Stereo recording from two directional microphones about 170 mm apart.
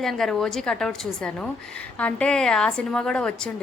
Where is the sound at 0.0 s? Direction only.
Centre (ahead or behind).